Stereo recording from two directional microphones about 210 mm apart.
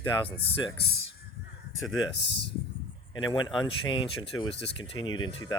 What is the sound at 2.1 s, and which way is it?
Speech, 55° left (ahead or behind).